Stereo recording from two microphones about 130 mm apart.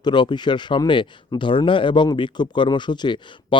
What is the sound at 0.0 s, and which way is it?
Speech, 35° left (ahead or behind).